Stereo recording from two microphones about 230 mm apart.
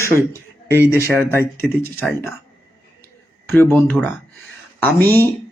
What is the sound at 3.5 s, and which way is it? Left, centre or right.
Speech, centre.